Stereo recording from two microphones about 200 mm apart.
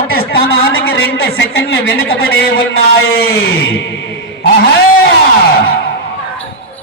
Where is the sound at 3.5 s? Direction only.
85° left.